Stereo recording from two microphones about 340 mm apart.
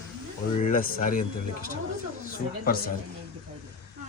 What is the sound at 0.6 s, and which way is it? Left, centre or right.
Speech, left.